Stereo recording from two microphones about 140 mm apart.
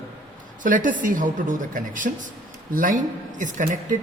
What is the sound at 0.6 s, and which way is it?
Speech, 70° right (ahead or behind).